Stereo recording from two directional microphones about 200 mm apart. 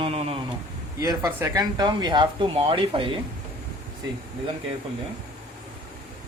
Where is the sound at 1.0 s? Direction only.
20° right (ahead or behind).